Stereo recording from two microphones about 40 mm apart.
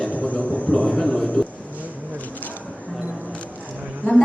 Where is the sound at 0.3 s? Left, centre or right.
Left.